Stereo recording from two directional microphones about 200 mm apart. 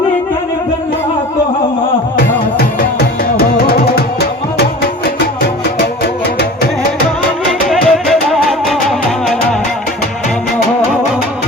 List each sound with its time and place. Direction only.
2.6 s music: 50° left (ahead or behind)
7.7 s music: centre (ahead or behind)